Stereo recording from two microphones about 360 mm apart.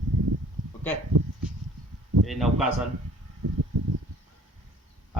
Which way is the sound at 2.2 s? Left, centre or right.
Centre.